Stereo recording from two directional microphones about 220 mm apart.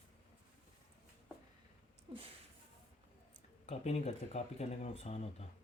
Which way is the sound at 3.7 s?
30° left (ahead or behind).